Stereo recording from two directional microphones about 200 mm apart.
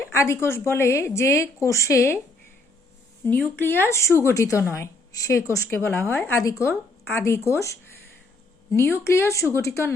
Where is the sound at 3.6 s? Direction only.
10° left (ahead or behind).